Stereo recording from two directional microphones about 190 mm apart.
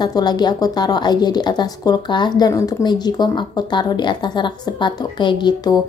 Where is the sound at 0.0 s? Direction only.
20° left (ahead or behind).